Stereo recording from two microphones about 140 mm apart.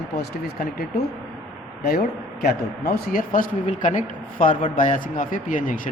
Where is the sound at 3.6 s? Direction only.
60° left (ahead or behind).